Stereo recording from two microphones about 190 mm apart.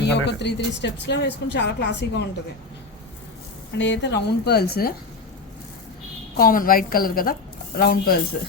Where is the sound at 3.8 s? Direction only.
70° left (ahead or behind).